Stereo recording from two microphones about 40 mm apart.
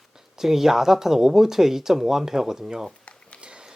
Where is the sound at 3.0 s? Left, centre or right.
Left.